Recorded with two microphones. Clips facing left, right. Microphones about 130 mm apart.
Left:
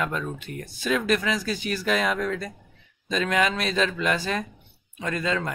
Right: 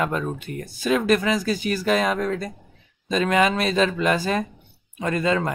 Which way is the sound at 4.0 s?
45° right (ahead or behind).